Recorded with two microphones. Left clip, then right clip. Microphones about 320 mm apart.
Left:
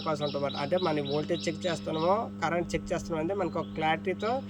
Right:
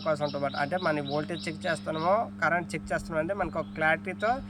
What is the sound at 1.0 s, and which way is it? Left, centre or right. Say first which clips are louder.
Speech: left 1 dB; right.